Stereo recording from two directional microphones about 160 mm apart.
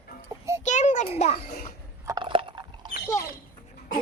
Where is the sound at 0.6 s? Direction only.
50° left (ahead or behind).